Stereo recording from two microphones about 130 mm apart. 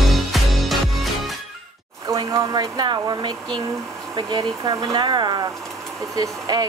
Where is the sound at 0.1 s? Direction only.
Centre (ahead or behind).